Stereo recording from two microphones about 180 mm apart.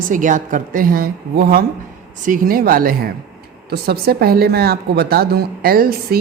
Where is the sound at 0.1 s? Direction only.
45° right (ahead or behind).